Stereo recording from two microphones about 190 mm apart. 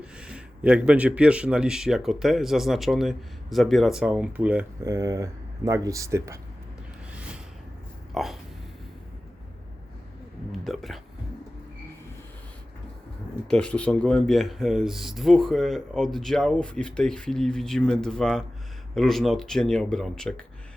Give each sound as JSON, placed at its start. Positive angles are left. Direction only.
{"t": 0.2, "sound": "speech", "side_deg": -5}
{"t": 8.1, "sound": "a sound", "side_deg": 0}
{"t": 10.6, "sound": "speech", "side_deg": 0}
{"t": 13.5, "sound": "speech", "side_deg": 5}